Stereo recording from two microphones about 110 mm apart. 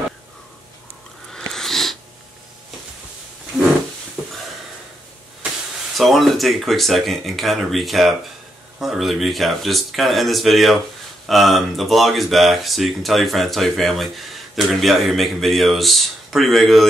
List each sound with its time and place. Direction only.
1.3 s wheeze: 5° left (ahead or behind)
5.9 s speech: centre (ahead or behind)